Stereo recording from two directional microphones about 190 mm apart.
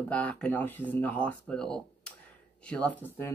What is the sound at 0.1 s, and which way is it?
Speech, 5° left (ahead or behind).